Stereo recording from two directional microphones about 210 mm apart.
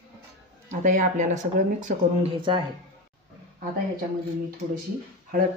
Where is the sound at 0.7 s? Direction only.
35° right (ahead or behind).